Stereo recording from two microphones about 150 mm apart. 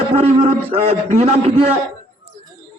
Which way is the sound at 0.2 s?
40° right (ahead or behind).